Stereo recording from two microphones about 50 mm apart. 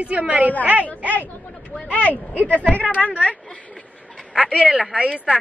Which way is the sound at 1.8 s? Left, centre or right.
Left.